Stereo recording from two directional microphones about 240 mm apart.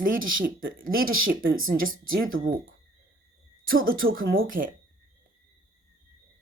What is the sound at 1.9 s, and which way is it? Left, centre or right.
Speech, right.